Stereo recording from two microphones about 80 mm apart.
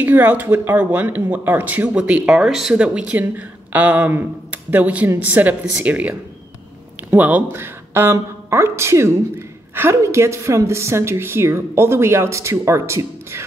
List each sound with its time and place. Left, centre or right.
0.0 s a woman's voice: right